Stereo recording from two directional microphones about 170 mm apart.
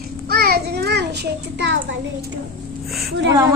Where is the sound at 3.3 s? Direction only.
20° right (ahead or behind).